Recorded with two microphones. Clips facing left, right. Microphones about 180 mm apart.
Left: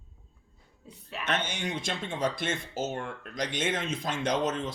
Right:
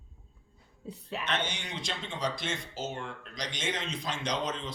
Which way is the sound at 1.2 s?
50° left (ahead or behind).